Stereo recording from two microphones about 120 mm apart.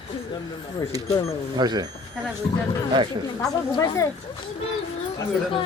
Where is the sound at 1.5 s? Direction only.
35° right (ahead or behind).